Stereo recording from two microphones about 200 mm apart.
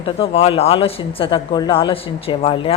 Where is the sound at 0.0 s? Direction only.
30° left (ahead or behind).